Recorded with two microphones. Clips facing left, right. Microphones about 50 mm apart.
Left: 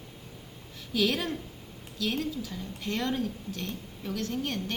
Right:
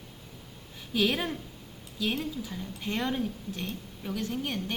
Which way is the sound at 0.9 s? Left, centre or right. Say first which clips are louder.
Even; centre.